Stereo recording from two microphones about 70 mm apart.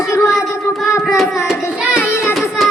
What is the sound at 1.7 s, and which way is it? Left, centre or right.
Child singing, centre.